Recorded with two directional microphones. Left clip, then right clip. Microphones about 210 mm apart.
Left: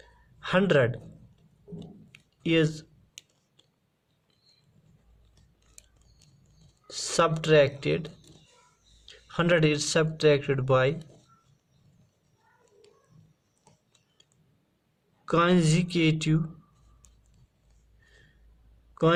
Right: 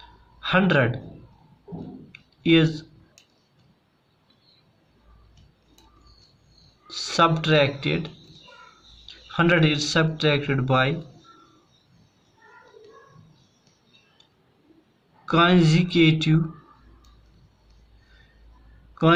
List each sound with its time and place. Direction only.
0.4 s speech: 50° left (ahead or behind)
2.1 s a sound: 50° left (ahead or behind)
6.9 s speech: 50° left (ahead or behind)
15.3 s speech: 50° left (ahead or behind)